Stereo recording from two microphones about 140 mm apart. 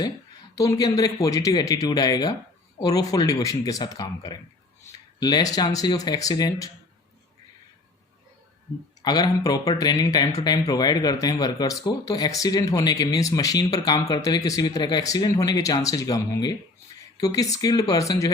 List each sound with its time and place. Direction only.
0.5 s speech: 25° left (ahead or behind)
9.0 s speech: 30° left (ahead or behind)